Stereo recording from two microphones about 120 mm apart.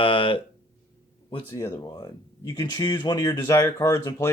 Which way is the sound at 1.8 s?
35° left (ahead or behind).